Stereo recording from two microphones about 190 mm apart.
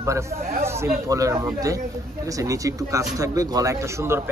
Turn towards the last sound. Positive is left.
turn(degrees=-15)  # may be behind; listen again after turning